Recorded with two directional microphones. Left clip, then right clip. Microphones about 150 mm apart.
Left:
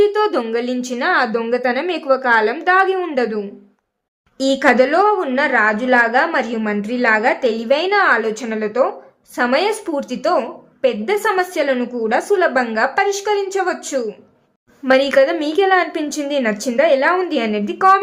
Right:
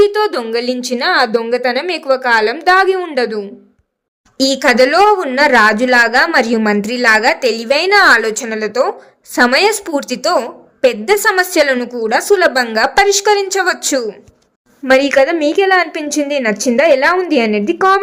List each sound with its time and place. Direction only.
0.0 s a woman's voice: 35° right (ahead or behind)
9.3 s a woman's voice: 35° right (ahead or behind)